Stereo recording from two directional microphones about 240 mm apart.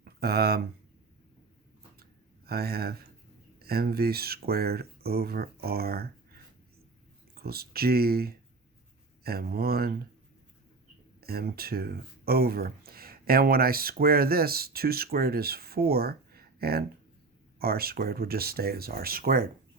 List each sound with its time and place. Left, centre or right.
0.0 s speech: right
2.5 s speech: right
7.4 s speech: right
11.2 s speech: right